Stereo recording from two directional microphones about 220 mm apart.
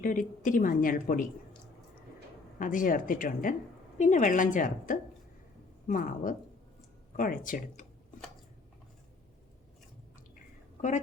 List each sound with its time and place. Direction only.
0.0 s a woman's voice: 40° left (ahead or behind)
2.6 s a woman's voice: 35° left (ahead or behind)
10.3 s chewing: 35° left (ahead or behind)